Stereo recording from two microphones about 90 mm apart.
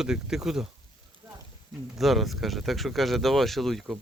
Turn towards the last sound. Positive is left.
turn(degrees=0)  # may be behind; listen again after turning